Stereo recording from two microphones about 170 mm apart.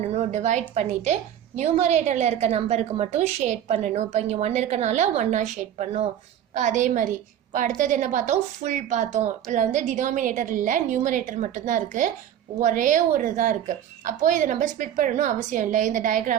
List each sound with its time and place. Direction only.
0.0 s a woman's voice: 40° right (ahead or behind)